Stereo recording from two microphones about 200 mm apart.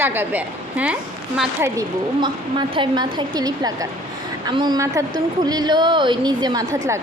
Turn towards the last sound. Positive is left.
turn(degrees=-15)  # may be behind; listen again after turning